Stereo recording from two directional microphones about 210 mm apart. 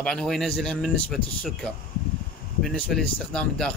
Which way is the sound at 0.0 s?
5° left (ahead or behind).